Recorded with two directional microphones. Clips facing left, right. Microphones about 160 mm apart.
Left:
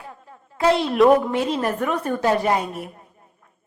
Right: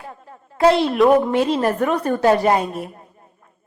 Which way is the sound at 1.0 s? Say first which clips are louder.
Even; centre (ahead or behind).